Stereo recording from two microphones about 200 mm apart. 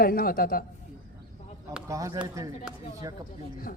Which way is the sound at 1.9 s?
15° right (ahead or behind).